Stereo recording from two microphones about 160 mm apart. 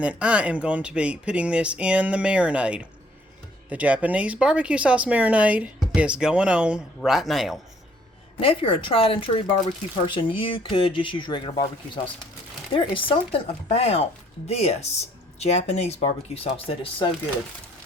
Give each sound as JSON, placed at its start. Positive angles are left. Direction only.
{"t": 0.0, "sound": "speech", "side_deg": -5}
{"t": 8.4, "sound": "speech", "side_deg": 35}
{"t": 12.7, "sound": "speech", "side_deg": 35}